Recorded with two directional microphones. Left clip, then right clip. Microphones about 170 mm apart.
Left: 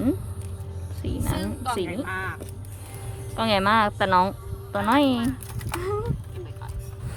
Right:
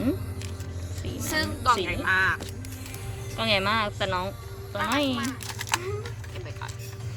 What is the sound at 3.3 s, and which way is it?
Speech, 35° left (ahead or behind).